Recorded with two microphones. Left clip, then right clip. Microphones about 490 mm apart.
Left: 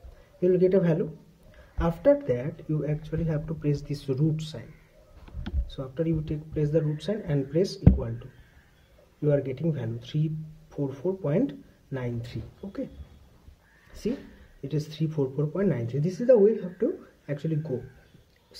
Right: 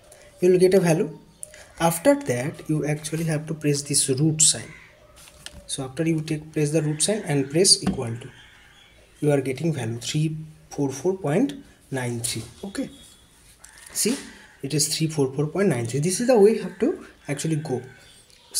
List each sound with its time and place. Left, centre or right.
0.4 s speech: left
9.2 s speech: left
14.7 s speech: left